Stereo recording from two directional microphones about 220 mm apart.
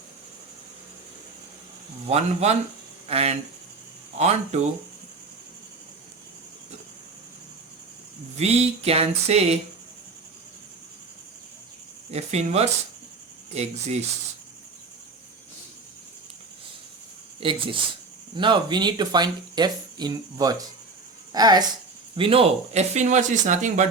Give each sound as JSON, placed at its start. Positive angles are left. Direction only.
{"t": 2.0, "sound": "speech", "side_deg": -30}
{"t": 8.4, "sound": "speech", "side_deg": -30}
{"t": 12.1, "sound": "speech", "side_deg": -30}
{"t": 17.4, "sound": "speech", "side_deg": -25}